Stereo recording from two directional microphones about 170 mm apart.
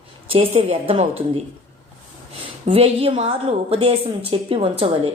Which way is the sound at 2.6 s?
35° right (ahead or behind).